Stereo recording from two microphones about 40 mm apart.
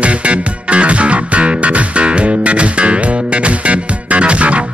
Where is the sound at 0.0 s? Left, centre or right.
Right.